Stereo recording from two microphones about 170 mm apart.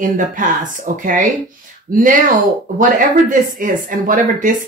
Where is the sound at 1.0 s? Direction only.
50° right (ahead or behind).